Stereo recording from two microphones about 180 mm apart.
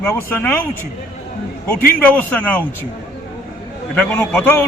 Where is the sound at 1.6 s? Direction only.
10° left (ahead or behind).